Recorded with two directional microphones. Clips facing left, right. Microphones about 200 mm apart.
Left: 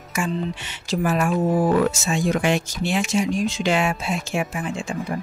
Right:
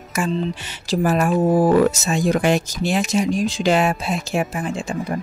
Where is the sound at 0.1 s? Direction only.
40° right (ahead or behind).